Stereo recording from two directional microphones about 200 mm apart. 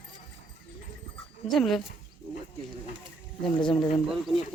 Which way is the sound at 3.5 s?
25° left (ahead or behind).